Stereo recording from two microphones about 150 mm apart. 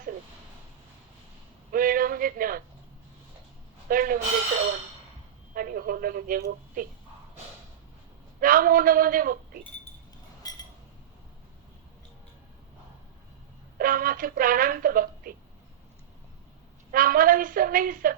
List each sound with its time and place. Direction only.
1.7 s a sound: 70° right (ahead or behind)
3.8 s speech: 70° right (ahead or behind)
5.5 s speech: 80° right
8.4 s speech: 70° right (ahead or behind)
10.4 s a sound: 25° left (ahead or behind)
13.7 s speech: 70° right (ahead or behind)
16.9 s speech: 70° right (ahead or behind)